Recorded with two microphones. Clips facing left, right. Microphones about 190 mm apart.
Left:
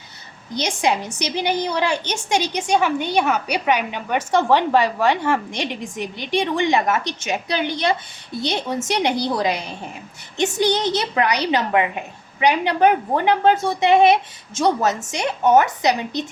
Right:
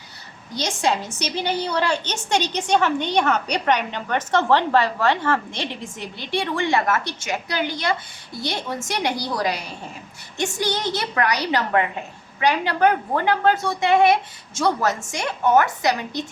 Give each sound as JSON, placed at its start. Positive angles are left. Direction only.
{"t": 0.5, "sound": "a woman's voice", "side_deg": 15}